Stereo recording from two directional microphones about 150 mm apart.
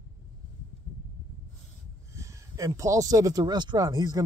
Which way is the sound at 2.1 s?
20° right (ahead or behind).